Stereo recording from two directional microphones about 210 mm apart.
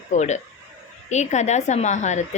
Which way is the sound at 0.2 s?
35° left (ahead or behind).